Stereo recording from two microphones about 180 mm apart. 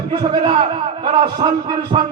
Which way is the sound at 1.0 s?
25° right (ahead or behind).